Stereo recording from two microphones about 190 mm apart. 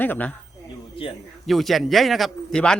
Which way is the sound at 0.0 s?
10° left (ahead or behind).